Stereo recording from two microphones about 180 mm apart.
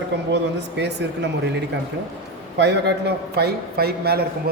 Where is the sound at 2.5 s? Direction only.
75° right (ahead or behind).